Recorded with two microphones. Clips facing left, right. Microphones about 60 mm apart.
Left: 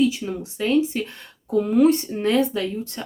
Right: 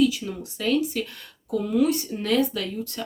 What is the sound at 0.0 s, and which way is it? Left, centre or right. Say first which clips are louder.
Speech: left 1 dB; left.